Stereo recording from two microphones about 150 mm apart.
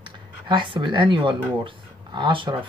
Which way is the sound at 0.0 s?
35° right (ahead or behind).